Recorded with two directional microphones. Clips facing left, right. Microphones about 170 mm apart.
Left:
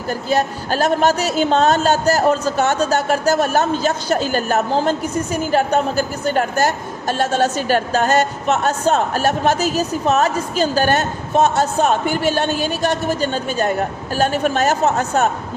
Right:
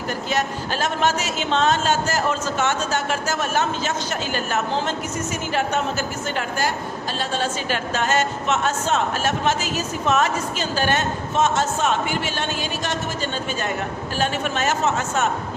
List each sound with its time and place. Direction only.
0.1 s speech: 35° left (ahead or behind)